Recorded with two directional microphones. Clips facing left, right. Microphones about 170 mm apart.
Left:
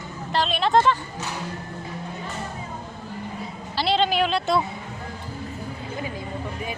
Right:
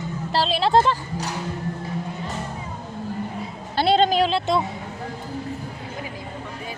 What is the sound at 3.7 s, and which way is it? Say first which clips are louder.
Speech: right 4 dB; 50° right (ahead or behind).